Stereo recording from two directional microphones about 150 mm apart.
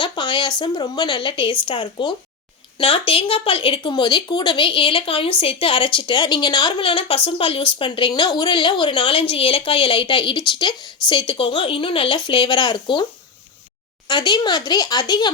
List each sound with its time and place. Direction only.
0.0 s a woman's voice: 30° left (ahead or behind)
14.1 s speech: 30° left (ahead or behind)